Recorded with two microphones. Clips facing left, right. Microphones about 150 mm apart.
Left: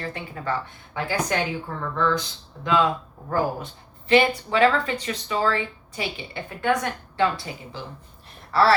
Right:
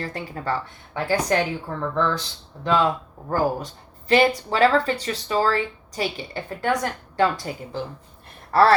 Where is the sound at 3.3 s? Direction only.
40° right (ahead or behind).